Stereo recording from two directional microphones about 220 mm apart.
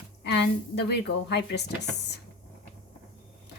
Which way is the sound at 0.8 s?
50° left (ahead or behind).